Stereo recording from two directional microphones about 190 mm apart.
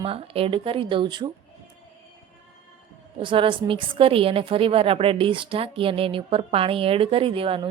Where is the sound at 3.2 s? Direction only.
25° right (ahead or behind).